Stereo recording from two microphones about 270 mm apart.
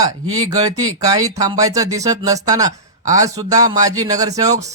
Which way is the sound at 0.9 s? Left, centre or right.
Centre.